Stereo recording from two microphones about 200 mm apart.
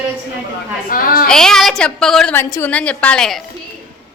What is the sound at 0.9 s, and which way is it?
Speech, 45° left (ahead or behind).